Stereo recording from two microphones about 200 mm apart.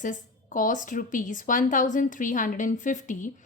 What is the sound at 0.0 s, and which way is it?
A woman's voice, 40° left (ahead or behind).